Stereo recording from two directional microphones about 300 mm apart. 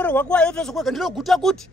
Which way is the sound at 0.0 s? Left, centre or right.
Centre.